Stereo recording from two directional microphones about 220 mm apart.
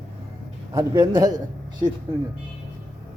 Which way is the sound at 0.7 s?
15° right (ahead or behind).